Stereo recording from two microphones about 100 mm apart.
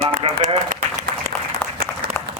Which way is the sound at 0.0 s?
80° right.